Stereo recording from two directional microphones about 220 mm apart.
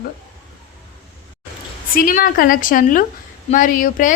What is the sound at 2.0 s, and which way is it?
A woman's voice, 40° left (ahead or behind).